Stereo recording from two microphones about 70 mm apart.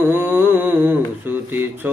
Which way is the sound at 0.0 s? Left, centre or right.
Right.